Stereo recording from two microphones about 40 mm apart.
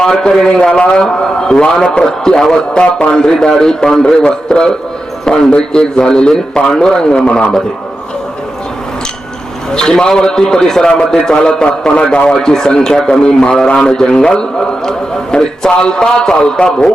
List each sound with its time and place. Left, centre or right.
0.0 s a man's voice: centre
2.7 s a man's voice: left
3.1 s a man's voice: centre
9.7 s a man's voice: centre